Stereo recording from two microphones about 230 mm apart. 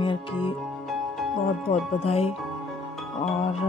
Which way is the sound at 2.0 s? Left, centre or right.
Left.